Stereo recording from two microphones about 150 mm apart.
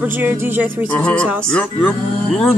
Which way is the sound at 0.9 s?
10° left (ahead or behind).